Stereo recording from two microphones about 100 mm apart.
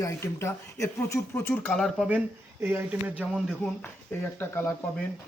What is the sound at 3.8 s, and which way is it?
Speech, 20° left (ahead or behind).